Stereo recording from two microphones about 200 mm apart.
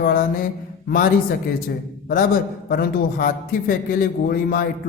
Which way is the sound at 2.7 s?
45° left (ahead or behind).